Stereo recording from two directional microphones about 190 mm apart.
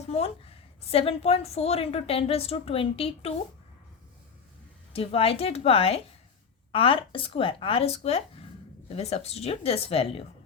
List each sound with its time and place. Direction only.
0.1 s a woman's voice: 30° left (ahead or behind)
4.9 s a woman's voice: 30° left (ahead or behind)